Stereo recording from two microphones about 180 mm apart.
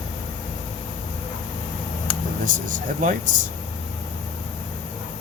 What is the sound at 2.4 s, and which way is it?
Speech, 45° right (ahead or behind).